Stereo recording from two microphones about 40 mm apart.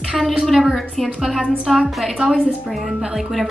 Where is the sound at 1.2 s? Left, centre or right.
Centre.